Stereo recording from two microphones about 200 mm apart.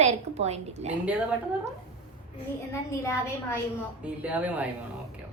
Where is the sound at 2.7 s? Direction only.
15° left (ahead or behind).